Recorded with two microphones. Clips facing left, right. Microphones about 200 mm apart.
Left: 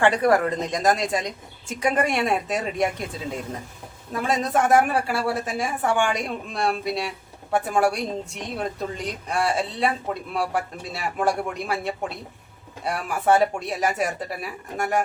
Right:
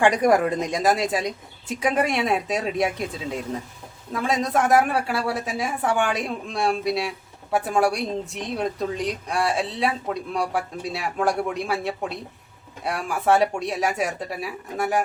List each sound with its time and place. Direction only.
0.0 s a woman's voice: 15° right (ahead or behind)